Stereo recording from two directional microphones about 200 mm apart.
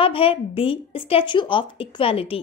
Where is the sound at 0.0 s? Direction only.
25° left (ahead or behind).